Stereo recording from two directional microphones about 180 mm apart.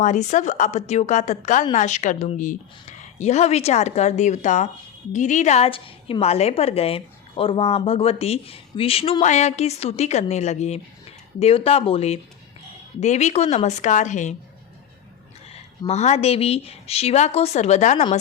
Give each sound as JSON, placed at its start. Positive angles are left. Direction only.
{"t": 0.0, "sound": "a woman's voice", "side_deg": 40}
{"t": 15.9, "sound": "a woman's voice", "side_deg": 40}